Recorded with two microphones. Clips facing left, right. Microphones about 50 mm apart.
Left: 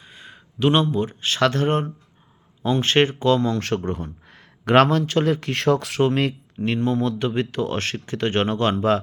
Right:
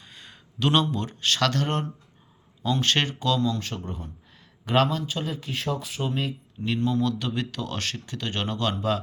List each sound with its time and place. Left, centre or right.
0.0 s speech: centre; by 3.4 s left
3.4 s a man's voice: left
6.7 s speech: left